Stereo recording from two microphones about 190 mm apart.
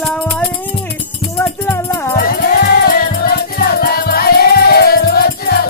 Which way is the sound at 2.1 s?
50° left (ahead or behind).